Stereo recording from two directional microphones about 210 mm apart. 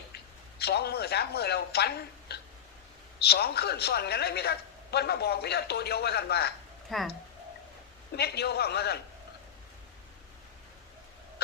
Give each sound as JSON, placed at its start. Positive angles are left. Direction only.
{"t": 0.6, "sound": "a man's voice", "side_deg": 50}
{"t": 6.9, "sound": "speech", "side_deg": 0}
{"t": 8.1, "sound": "a man's voice", "side_deg": 50}